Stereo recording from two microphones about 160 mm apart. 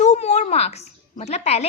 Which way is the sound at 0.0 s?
45° left (ahead or behind).